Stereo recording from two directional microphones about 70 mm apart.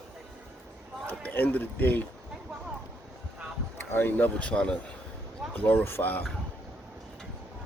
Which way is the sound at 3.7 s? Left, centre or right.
Left.